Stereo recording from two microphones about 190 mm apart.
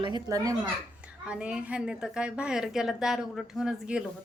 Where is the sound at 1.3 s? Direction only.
5° right (ahead or behind).